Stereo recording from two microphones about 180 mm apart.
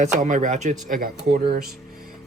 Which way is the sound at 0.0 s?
45° right (ahead or behind).